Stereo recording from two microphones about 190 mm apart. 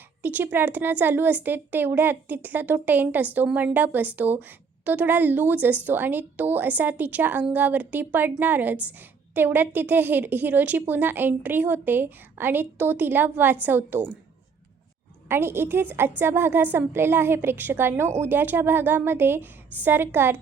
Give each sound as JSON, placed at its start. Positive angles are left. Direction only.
{"t": 0.2, "sound": "a woman's voice", "side_deg": -10}
{"t": 15.3, "sound": "a woman's voice", "side_deg": -10}